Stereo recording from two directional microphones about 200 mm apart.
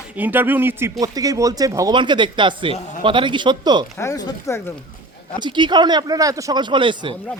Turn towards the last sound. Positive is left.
turn(degrees=-25)  # may be behind; listen again after turning